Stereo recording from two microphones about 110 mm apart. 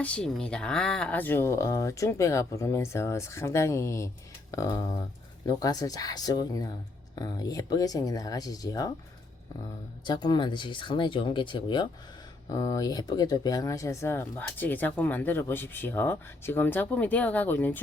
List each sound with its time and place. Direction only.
0.0 s speech: 10° left (ahead or behind); by 8.9 s 35° left (ahead or behind)
10.1 s speech: 40° left (ahead or behind)
12.5 s speech: 35° left (ahead or behind); by 17.7 s 15° left (ahead or behind)